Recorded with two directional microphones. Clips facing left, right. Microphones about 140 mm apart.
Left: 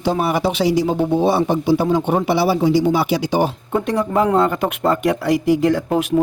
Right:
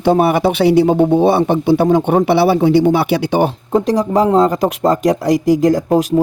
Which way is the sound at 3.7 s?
35° right (ahead or behind).